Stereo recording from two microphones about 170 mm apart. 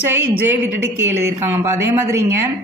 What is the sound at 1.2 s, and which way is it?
A woman's voice, 15° right (ahead or behind).